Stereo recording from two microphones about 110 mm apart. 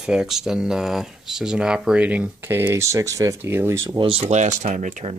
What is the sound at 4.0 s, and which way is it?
Speech, 60° right (ahead or behind).